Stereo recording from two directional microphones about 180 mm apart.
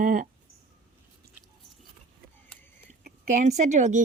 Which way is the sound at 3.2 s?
40° right (ahead or behind).